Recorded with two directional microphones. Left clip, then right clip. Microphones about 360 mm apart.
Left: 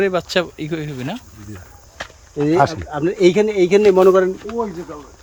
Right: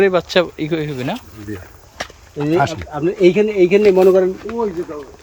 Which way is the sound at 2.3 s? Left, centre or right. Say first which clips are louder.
Left 1 dB; centre.